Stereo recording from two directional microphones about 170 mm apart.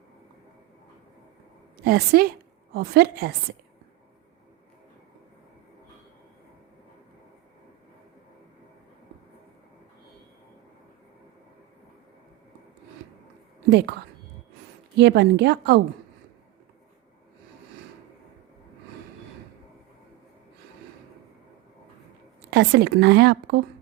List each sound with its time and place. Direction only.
1.8 s a woman's voice: 65° right (ahead or behind)
13.7 s a woman's voice: 80° right
14.9 s a woman's voice: 85° right
22.4 s speech: 80° right